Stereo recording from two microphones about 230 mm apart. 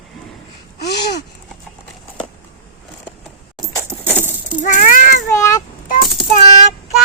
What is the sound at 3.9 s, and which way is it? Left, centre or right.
Coin, centre.